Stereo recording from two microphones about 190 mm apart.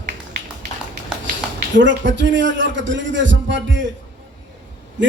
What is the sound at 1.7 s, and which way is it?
A man's voice, 75° right (ahead or behind).